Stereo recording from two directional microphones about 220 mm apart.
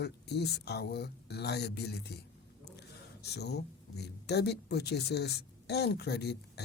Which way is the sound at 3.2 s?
50° left (ahead or behind).